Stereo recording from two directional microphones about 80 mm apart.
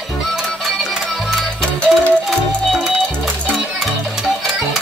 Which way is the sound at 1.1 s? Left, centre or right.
Centre.